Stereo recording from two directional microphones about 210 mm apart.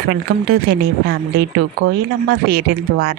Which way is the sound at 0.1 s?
50° right (ahead or behind).